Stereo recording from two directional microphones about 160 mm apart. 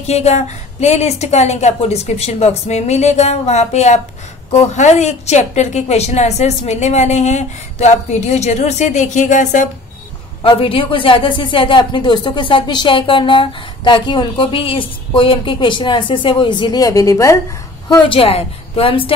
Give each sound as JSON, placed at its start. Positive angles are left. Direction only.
{"t": 0.0, "sound": "a woman's voice", "side_deg": 45}
{"t": 10.6, "sound": "speech", "side_deg": 35}
{"t": 18.0, "sound": "speech", "side_deg": 35}